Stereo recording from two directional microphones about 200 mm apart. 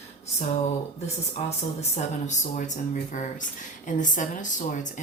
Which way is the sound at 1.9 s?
35° left (ahead or behind).